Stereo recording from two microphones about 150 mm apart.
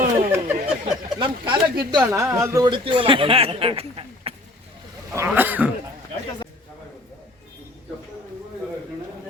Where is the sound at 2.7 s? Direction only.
35° right (ahead or behind).